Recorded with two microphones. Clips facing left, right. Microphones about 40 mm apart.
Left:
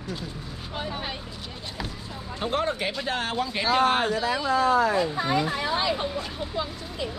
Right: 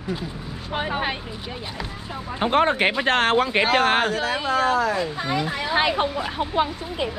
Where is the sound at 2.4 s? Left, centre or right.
Right.